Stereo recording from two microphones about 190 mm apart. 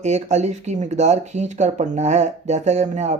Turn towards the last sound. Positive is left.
turn(degrees=-35)  # may be behind; listen again after turning